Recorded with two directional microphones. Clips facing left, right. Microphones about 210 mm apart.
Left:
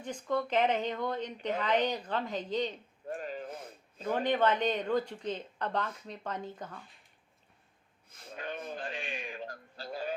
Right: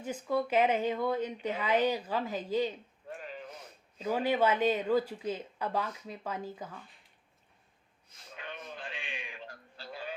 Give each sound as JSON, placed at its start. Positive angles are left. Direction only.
{"t": 0.0, "sound": "speech", "side_deg": -5}
{"t": 3.1, "sound": "a sound", "side_deg": 45}
{"t": 4.0, "sound": "speech", "side_deg": -5}
{"t": 8.3, "sound": "bleat", "side_deg": 45}